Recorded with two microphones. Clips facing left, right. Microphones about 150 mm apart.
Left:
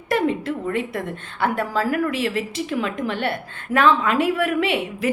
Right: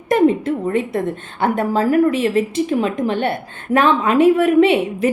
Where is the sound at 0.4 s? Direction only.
20° right (ahead or behind).